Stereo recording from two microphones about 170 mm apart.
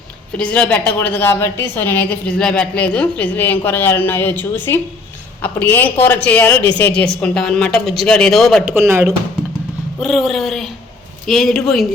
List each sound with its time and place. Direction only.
0.3 s a woman's voice: 5° left (ahead or behind)
8.7 s speech: 15° right (ahead or behind)
10.0 s speech: centre (ahead or behind)